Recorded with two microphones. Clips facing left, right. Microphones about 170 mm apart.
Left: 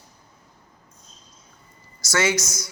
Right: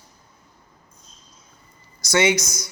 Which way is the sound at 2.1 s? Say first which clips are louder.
Right 3 dB; 20° right (ahead or behind).